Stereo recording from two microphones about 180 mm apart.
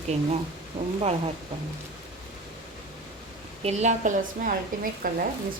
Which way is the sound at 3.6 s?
40° right (ahead or behind).